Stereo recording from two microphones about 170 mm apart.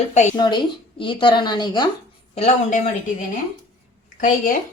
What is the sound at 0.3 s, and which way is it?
Speech, 25° left (ahead or behind).